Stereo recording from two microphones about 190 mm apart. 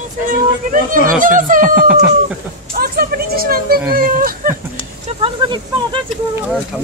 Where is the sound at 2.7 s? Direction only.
55° right (ahead or behind).